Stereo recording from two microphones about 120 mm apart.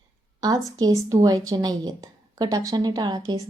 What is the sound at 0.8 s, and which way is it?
A woman's voice, 30° right (ahead or behind).